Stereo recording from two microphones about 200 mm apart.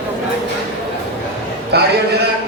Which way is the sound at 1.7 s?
55° right (ahead or behind).